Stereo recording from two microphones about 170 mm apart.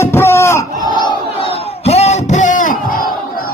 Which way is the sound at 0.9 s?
30° left (ahead or behind).